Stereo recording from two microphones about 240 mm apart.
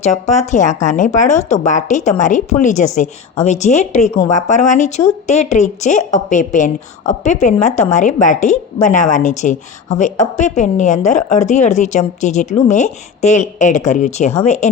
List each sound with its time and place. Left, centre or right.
0.0 s a woman's voice: left